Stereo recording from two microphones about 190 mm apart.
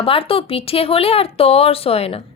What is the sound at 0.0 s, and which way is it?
Speech, 30° left (ahead or behind).